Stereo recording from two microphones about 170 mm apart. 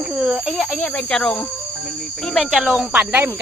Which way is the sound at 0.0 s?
5° right (ahead or behind).